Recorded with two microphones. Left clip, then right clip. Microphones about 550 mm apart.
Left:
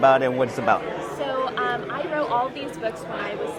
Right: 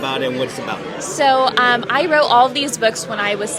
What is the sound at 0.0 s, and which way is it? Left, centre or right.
Speech, left.